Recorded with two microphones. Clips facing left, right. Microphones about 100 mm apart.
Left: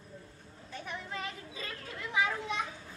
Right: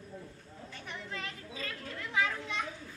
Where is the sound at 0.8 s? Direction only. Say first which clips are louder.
Left 2 dB; 15° left (ahead or behind).